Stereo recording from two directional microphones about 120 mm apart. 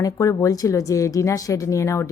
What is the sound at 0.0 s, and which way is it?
A woman's voice, 30° left (ahead or behind).